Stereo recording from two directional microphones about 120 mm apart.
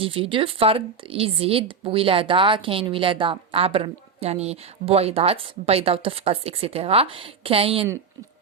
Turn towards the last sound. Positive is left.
turn(degrees=-55)  # may be behind; listen again after turning